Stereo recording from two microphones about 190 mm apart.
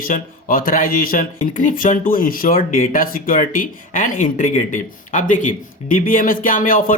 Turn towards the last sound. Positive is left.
turn(degrees=45)  # may be behind; listen again after turning